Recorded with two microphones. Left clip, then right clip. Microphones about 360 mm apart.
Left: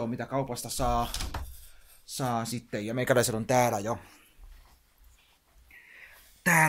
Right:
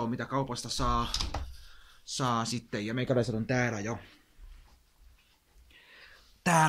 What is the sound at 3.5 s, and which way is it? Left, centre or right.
Speech, centre.